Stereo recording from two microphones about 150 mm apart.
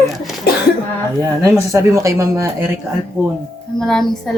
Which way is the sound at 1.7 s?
20° right (ahead or behind).